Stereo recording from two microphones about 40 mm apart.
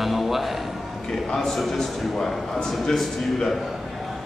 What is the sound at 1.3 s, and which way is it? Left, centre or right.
A man's voice, centre.